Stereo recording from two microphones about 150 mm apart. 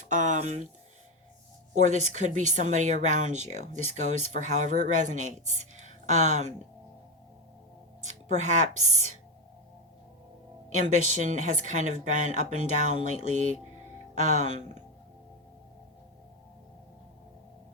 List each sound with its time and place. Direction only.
0.1 s speech: 55° right (ahead or behind)
1.7 s speech: 50° right (ahead or behind)
8.0 s speech: 50° right (ahead or behind)
10.7 s speech: 55° right (ahead or behind)